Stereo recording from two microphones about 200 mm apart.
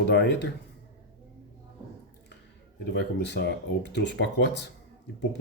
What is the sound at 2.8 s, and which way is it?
Speech, 60° left (ahead or behind).